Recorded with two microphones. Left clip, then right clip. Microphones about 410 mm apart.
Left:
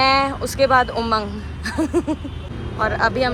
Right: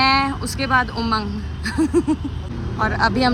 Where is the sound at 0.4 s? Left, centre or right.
Centre.